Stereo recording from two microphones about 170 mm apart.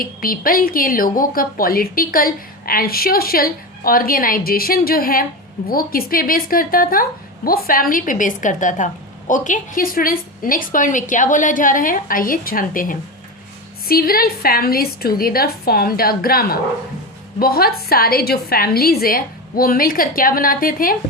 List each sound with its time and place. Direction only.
0.0 s a woman's voice: 55° left (ahead or behind)